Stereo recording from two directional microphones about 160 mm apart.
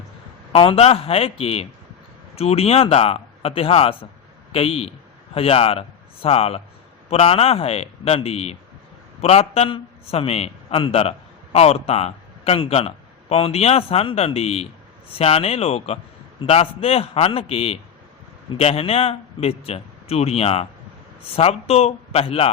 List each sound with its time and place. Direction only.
0.5 s a man's voice: 35° left (ahead or behind)